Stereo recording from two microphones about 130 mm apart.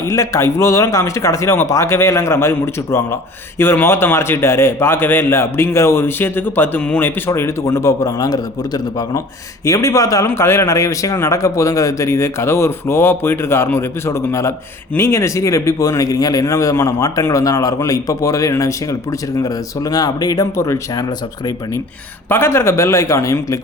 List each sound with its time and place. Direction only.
0.0 s a man's voice: 20° left (ahead or behind)